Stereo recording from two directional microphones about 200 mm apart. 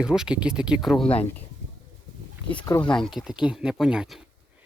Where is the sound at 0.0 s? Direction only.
5° right (ahead or behind).